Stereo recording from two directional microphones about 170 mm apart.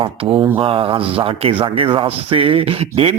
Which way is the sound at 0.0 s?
30° right (ahead or behind).